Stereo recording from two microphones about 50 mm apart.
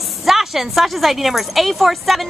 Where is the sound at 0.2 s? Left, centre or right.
Centre.